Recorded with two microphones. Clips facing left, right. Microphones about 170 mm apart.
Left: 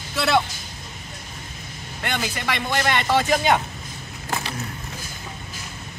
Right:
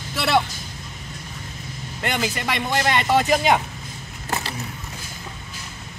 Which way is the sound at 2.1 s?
5° right (ahead or behind).